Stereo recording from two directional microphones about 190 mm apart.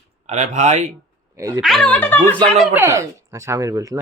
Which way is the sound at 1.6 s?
Centre (ahead or behind).